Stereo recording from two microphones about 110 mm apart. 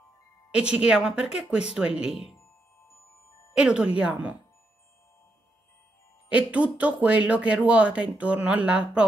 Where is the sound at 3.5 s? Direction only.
10° right (ahead or behind).